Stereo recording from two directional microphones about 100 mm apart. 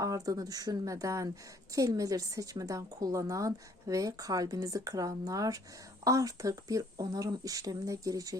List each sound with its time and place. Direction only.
0.0 s a woman's voice: 35° right (ahead or behind)